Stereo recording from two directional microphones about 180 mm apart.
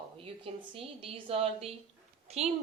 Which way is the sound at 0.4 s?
30° right (ahead or behind).